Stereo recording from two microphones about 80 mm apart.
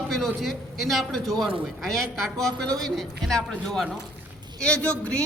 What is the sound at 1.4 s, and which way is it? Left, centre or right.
Speech, right.